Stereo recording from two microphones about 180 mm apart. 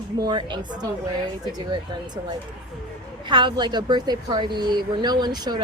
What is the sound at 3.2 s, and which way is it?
A woman's voice, 25° right (ahead or behind).